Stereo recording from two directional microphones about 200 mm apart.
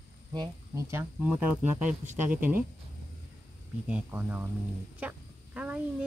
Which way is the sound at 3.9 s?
5° right (ahead or behind).